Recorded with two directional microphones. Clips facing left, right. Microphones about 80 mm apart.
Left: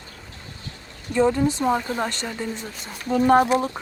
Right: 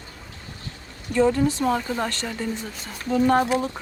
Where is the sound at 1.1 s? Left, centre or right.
Centre.